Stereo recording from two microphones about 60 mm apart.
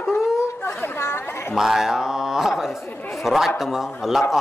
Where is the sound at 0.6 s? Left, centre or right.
Left.